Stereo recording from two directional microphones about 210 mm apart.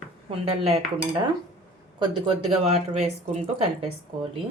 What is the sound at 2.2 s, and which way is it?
Speech, 25° right (ahead or behind).